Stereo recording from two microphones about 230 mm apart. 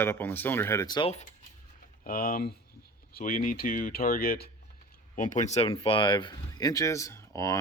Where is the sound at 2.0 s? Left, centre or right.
Left.